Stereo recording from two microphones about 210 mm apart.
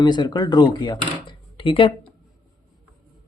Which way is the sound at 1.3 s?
25° left (ahead or behind).